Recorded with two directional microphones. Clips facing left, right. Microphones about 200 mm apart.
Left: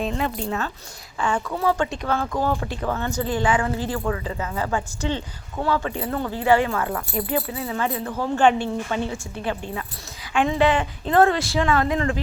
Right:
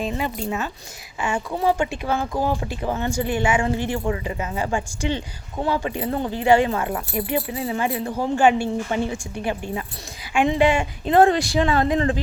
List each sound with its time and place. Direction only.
0.0 s a woman's voice: 5° right (ahead or behind)